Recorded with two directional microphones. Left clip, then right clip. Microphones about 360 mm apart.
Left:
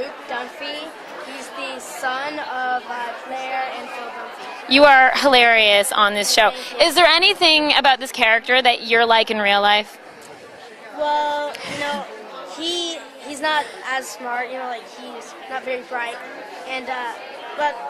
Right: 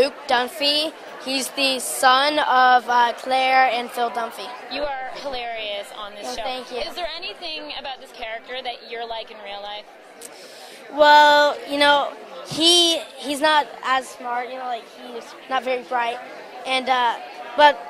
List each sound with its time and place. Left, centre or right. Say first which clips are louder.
0.0 s a woman's voice: right 8 dB; centre
4.6 s a woman's voice: left 18 dB; left
11.0 s a woman's voice: right 8 dB; right